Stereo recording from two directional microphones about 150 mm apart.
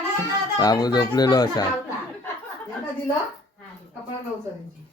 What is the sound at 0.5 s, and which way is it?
Speech, 25° left (ahead or behind).